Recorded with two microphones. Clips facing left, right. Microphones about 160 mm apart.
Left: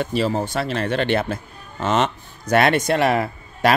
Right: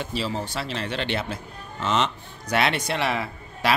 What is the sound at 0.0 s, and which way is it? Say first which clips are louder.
Speech: left 7 dB; 55° left (ahead or behind).